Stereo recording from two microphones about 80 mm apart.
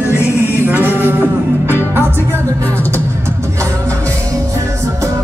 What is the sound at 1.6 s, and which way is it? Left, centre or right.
Music, right.